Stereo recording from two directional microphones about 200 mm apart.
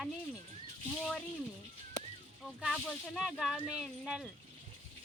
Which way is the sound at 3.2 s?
Centre (ahead or behind).